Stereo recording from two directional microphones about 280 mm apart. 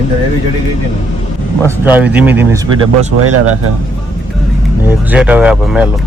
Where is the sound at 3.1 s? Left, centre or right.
Right.